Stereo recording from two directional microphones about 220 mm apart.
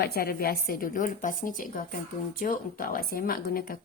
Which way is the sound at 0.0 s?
45° left (ahead or behind).